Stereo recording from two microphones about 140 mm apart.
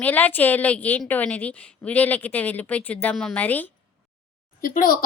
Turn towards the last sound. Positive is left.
turn(degrees=85)